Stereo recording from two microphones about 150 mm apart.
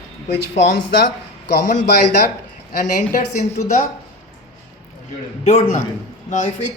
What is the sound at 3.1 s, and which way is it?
Speech, 65° left (ahead or behind).